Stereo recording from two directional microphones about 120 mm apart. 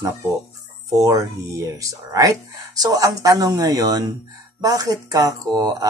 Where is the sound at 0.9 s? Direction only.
30° right (ahead or behind).